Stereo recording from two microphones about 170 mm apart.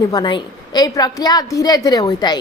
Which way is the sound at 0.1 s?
25° left (ahead or behind).